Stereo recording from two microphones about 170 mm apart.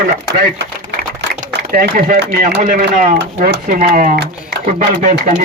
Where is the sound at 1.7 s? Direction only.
55° right (ahead or behind).